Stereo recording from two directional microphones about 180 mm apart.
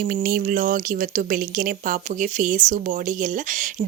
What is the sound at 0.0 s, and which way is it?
A woman's voice, 60° right (ahead or behind).